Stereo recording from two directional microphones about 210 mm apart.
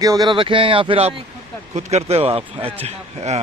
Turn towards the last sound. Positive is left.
turn(degrees=-30)  # may be behind; listen again after turning